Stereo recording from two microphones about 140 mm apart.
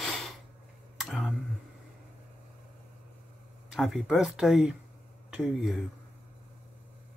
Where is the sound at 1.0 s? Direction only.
Centre (ahead or behind).